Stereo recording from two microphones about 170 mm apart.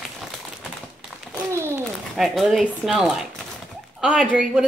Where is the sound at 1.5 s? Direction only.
15° right (ahead or behind).